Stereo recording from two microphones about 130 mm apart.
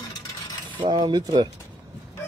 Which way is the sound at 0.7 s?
35° right (ahead or behind).